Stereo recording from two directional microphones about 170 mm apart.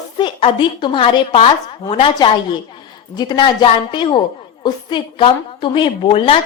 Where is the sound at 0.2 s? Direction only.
30° left (ahead or behind).